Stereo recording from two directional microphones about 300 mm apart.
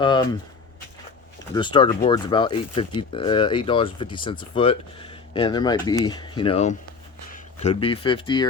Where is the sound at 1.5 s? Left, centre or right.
Centre.